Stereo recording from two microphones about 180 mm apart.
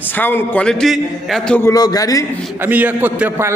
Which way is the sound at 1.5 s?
15° left (ahead or behind).